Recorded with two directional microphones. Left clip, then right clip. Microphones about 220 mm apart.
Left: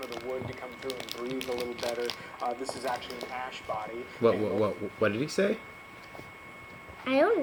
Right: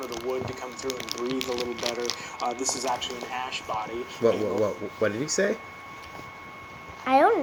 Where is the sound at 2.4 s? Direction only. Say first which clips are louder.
Right 4 dB; 45° right (ahead or behind).